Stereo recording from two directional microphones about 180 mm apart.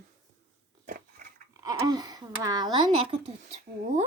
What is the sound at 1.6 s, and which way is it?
Speech, 20° right (ahead or behind).